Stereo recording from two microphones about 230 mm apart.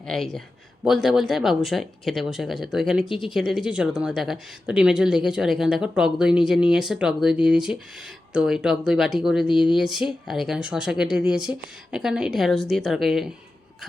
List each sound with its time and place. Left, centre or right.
0.0 s speech: centre
9.5 s speech: left
9.7 s speech: centre